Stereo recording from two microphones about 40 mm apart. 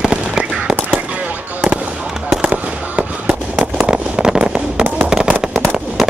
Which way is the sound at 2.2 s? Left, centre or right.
Right.